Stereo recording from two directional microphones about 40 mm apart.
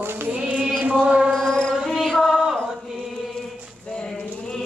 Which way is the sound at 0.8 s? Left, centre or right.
Right.